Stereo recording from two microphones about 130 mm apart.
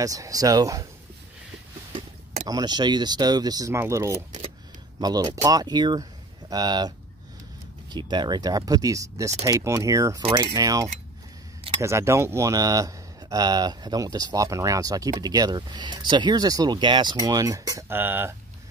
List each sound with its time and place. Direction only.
0.0 s speech: 25° right (ahead or behind)
2.4 s speech: 30° right (ahead or behind)
7.9 s speech: 35° right (ahead or behind); by 18.3 s 15° right (ahead or behind)